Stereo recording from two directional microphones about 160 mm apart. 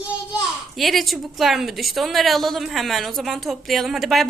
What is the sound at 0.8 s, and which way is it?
A woman's voice, centre (ahead or behind).